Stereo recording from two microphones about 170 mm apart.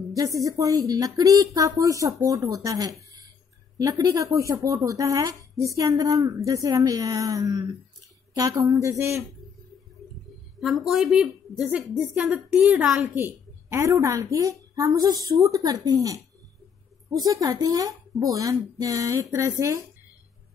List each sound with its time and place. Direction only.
0.1 s a woman's voice: 20° right (ahead or behind)
10.6 s a woman's voice: centre (ahead or behind)
13.7 s a woman's voice: 20° right (ahead or behind)
17.2 s a woman's voice: 20° right (ahead or behind)